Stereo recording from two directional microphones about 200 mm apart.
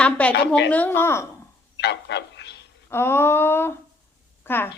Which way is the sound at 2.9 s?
10° left (ahead or behind).